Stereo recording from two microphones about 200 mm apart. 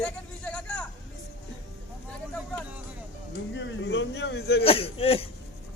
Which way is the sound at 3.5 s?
65° left (ahead or behind).